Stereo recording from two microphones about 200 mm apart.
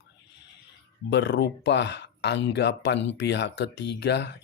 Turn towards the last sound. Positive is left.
turn(degrees=60)  # may be behind; listen again after turning